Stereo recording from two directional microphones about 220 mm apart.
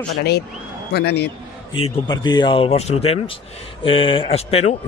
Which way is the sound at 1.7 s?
20° left (ahead or behind).